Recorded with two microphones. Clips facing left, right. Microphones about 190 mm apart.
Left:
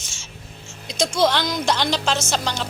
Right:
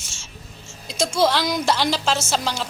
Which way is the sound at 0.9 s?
5° right (ahead or behind).